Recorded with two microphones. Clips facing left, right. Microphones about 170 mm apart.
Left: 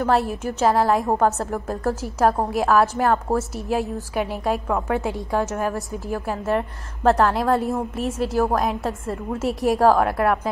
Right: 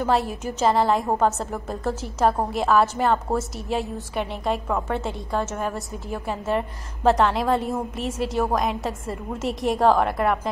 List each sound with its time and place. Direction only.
0.0 s a woman's voice: centre (ahead or behind)